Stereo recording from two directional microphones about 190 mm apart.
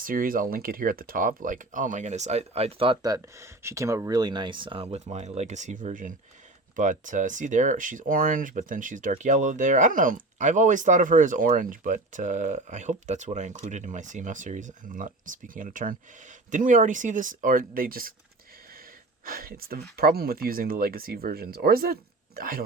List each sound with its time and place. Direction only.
0.0 s speech: 50° right (ahead or behind)
19.2 s speech: 50° right (ahead or behind)